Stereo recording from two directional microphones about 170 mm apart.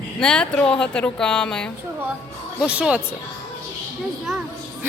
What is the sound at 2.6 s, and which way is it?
Speech, 5° right (ahead or behind).